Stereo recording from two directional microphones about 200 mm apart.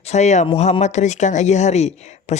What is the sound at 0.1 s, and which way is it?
Speech, 35° left (ahead or behind).